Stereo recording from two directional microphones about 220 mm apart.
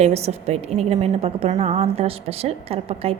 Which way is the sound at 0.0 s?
30° right (ahead or behind).